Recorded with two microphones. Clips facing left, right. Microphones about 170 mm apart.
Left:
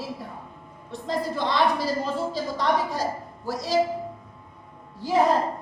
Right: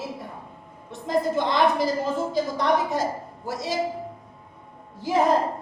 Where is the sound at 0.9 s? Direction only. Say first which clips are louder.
Right 4 dB; 20° right (ahead or behind).